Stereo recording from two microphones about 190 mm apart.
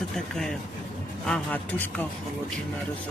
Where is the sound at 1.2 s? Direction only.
5° left (ahead or behind).